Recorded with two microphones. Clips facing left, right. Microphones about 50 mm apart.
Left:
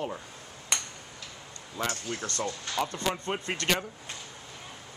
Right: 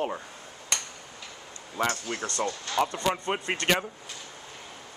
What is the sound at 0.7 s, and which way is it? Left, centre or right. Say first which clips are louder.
Tick-tock: even; centre.